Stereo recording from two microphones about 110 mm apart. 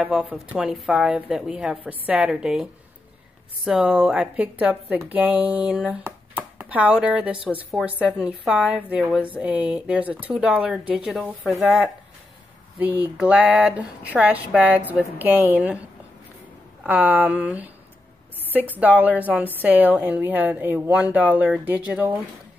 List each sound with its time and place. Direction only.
0.0 s a woman's voice: 10° right (ahead or behind)
12.7 s a woman's voice: 15° right (ahead or behind)
16.8 s a woman's voice: 15° right (ahead or behind)